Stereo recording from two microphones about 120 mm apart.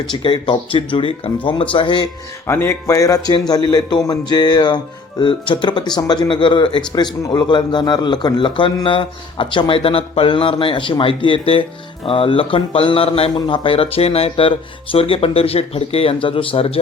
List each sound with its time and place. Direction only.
0.0 s a man's voice: 40° left (ahead or behind)
2.5 s a man's voice: 20° left (ahead or behind); by 13.3 s 55° left (ahead or behind)
13.3 s a man's voice: 45° left (ahead or behind)